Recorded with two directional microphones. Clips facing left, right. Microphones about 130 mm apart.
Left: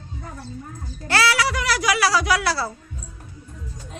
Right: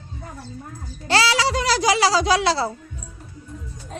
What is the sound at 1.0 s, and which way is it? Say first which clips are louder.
Speech: right 1 dB; 25° right (ahead or behind).